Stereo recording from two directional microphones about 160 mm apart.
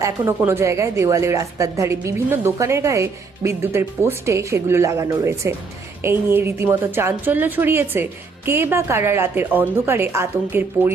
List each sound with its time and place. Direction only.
0.0 s a woman's voice: 15° right (ahead or behind)